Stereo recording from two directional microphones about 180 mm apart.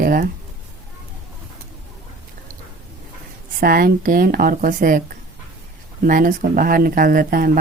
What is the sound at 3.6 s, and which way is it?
Speech, 55° right (ahead or behind).